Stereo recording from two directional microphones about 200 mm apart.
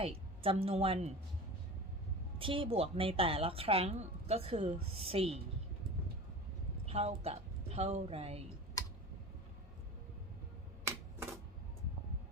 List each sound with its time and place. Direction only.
0.0 s a woman's voice: 30° right (ahead or behind)
2.4 s speech: 25° right (ahead or behind)
6.8 s a woman's voice: 30° right (ahead or behind)